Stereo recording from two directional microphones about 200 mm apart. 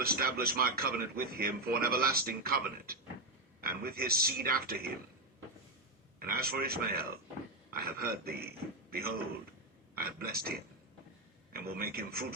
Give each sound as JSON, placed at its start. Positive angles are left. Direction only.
{"t": 0.0, "sound": "speech", "side_deg": -50}
{"t": 6.1, "sound": "speech", "side_deg": -50}